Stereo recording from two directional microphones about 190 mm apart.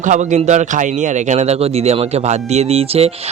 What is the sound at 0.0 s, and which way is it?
A man's voice, 40° right (ahead or behind).